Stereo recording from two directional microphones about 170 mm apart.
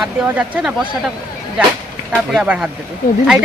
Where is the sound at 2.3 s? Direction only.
5° right (ahead or behind).